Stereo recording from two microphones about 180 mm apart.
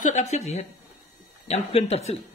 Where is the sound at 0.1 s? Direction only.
40° left (ahead or behind).